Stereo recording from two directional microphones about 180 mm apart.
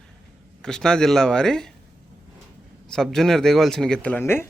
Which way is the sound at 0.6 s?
5° left (ahead or behind).